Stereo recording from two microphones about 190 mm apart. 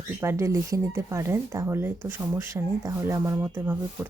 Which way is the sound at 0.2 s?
15° right (ahead or behind).